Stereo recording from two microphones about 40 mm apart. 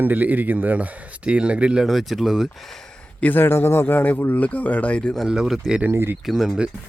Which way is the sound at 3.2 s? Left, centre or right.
Left.